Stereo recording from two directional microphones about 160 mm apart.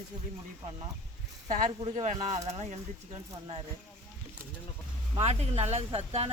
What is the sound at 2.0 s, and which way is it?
Speech, 45° right (ahead or behind).